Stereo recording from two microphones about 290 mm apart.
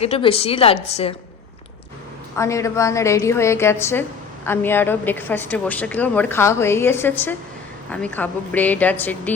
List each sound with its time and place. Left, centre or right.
0.0 s a woman's voice: centre
2.4 s a woman's voice: centre